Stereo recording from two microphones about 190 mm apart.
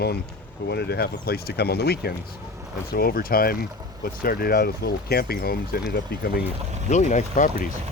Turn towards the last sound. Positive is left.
turn(degrees=40)  # may be behind; listen again after turning